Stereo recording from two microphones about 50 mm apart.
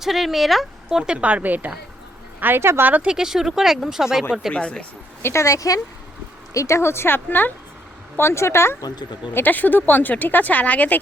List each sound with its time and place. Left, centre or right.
0.0 s speech: centre
0.9 s speech: centre
1.2 s a woman's voice: right
2.6 s speech: right
2.8 s a woman's voice: right
3.1 s speech: centre
4.5 s speech: left
5.2 s speech: left
6.5 s speech: left
7.3 s speech: left
8.1 s speech: left
9.3 s speech: left